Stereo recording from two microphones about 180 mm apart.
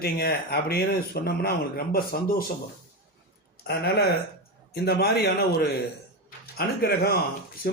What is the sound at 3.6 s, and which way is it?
Speech, 65° left (ahead or behind).